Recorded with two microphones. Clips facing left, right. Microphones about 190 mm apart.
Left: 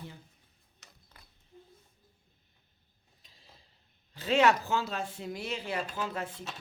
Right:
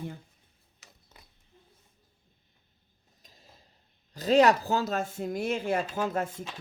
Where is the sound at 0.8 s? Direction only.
5° right (ahead or behind).